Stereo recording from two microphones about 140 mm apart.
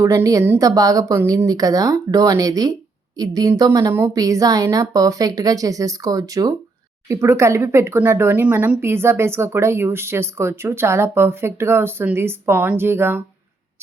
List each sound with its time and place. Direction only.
0.0 s a woman's voice: 20° right (ahead or behind)